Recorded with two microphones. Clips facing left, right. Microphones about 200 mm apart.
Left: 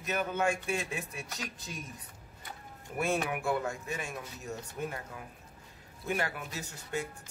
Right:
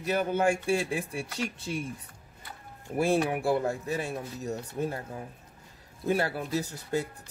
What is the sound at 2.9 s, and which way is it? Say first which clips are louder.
Speech: right 6 dB; 30° right (ahead or behind).